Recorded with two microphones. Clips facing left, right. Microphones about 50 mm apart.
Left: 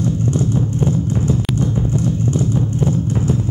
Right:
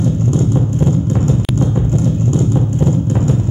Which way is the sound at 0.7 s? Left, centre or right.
Right.